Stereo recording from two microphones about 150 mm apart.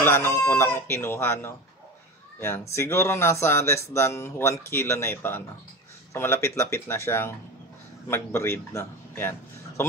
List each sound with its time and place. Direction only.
0.0 s speech: 15° left (ahead or behind)